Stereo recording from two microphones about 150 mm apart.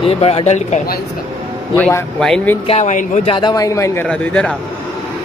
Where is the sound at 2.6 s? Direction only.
45° left (ahead or behind).